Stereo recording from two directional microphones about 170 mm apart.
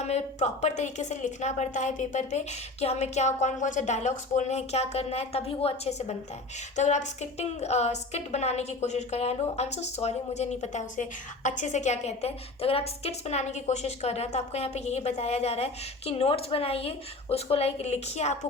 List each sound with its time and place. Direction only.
0.0 s a woman's voice: 40° left (ahead or behind)